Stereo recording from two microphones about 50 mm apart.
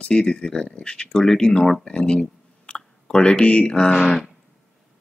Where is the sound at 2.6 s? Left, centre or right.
Left.